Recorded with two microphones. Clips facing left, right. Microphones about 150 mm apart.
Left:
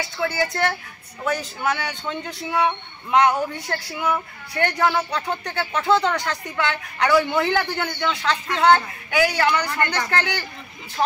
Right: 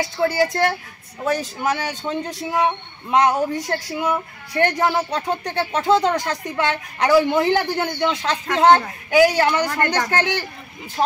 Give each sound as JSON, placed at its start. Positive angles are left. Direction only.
{"t": 0.0, "sound": "speech", "side_deg": -40}
{"t": 8.0, "sound": "speech", "side_deg": -20}
{"t": 8.3, "sound": "speech", "side_deg": -40}